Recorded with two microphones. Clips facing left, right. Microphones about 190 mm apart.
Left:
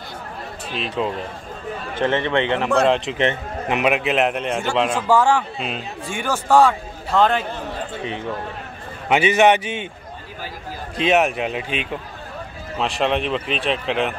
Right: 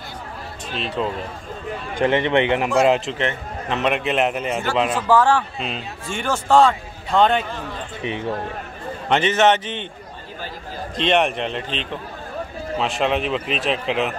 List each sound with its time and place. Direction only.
0.7 s a man's voice: centre (ahead or behind)
2.0 s a man's voice: 15° right (ahead or behind)
2.8 s a man's voice: 5° right (ahead or behind)
3.2 s a man's voice: 15° left (ahead or behind); by 5.0 s 5° right (ahead or behind)
5.0 s a man's voice: 10° left (ahead or behind)
9.1 s a man's voice: 10° left (ahead or behind)
11.0 s a man's voice: 5° left (ahead or behind)
12.7 s a man's voice: centre (ahead or behind)